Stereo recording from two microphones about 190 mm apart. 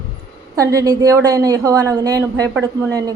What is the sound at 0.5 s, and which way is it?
A man's voice, 15° right (ahead or behind).